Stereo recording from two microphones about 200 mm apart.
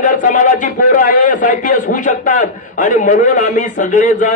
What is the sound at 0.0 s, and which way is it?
A man's voice, 40° left (ahead or behind).